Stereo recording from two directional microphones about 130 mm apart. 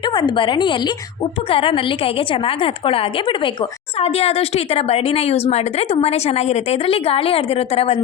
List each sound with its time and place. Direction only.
0.0 s a woman's voice: 35° left (ahead or behind)